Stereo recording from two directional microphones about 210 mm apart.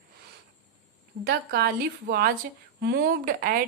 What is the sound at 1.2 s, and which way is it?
A woman's voice, 50° right (ahead or behind).